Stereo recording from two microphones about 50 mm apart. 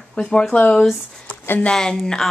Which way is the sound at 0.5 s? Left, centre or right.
Left.